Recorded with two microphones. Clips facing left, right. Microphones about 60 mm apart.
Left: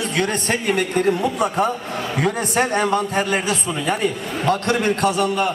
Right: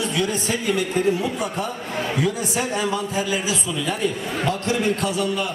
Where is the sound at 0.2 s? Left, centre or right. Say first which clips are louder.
Left 5 dB; left.